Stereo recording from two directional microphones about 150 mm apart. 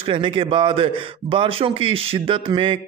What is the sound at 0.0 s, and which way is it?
A man's voice, 35° right (ahead or behind).